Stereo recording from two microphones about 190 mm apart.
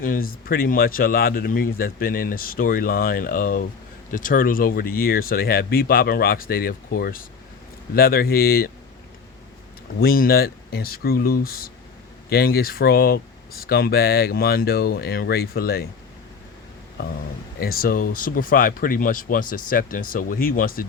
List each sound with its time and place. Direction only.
0.0 s speech: 50° left (ahead or behind)
10.0 s speech: 50° left (ahead or behind)
17.6 s speech: 50° left (ahead or behind)